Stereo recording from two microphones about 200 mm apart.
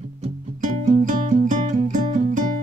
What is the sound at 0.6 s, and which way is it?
Music, 45° right (ahead or behind).